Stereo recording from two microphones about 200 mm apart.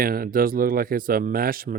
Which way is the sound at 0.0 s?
45° right (ahead or behind).